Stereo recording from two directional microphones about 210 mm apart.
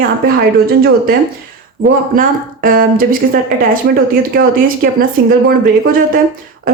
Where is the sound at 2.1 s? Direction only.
45° right (ahead or behind).